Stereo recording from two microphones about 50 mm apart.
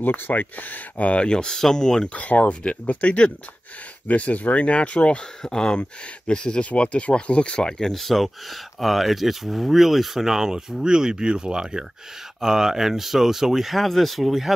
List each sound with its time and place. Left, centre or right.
0.0 s speech: left; by 2.0 s centre
2.1 s speech: left
7.9 s speech: centre
13.7 s speech: centre